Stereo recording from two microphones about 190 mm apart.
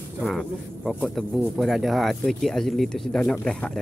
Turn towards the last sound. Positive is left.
turn(degrees=5)  # may be behind; listen again after turning